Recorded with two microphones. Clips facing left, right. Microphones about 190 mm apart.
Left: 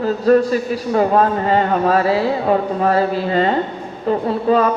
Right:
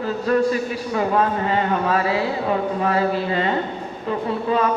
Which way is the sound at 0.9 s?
40° left (ahead or behind).